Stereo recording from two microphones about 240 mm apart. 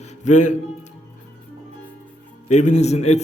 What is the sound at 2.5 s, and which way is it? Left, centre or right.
Speech, left.